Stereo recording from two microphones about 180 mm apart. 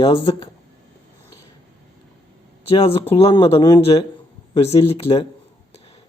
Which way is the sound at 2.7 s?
30° left (ahead or behind).